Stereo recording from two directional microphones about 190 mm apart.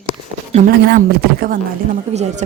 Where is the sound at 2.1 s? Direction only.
35° right (ahead or behind).